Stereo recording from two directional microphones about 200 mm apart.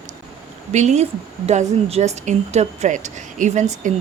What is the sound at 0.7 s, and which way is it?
A woman's voice, 35° right (ahead or behind).